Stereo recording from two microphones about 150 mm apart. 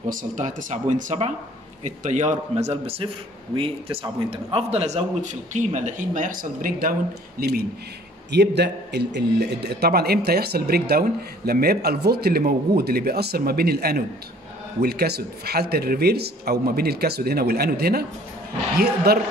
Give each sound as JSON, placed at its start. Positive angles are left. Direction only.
{"t": 0.1, "sound": "a man's voice", "side_deg": -60}